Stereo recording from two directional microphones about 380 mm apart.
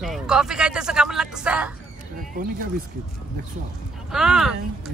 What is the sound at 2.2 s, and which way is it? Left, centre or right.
Speech, right.